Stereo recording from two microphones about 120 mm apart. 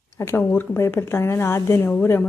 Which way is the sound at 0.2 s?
20° left (ahead or behind).